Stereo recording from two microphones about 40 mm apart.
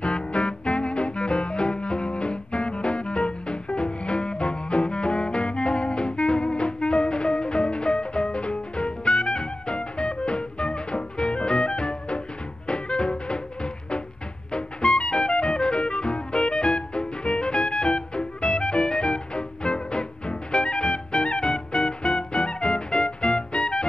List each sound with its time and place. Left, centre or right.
0.0 s music: left